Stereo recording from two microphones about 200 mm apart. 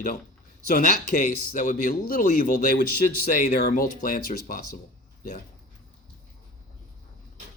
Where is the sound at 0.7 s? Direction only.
40° left (ahead or behind).